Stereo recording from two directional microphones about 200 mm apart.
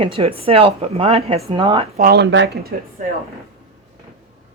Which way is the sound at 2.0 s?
55° right (ahead or behind).